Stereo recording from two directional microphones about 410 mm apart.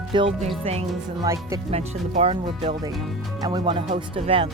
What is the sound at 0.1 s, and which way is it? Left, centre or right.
Speech, centre.